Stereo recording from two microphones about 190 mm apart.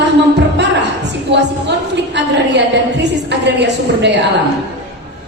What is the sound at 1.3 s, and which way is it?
A woman's voice, 65° right (ahead or behind).